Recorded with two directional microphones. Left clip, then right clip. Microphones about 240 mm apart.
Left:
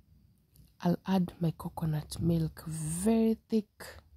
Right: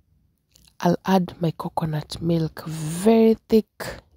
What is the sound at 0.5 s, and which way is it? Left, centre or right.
Speech, right.